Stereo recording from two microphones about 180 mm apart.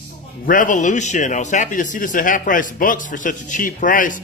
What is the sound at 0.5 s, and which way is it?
A man's voice, 45° left (ahead or behind).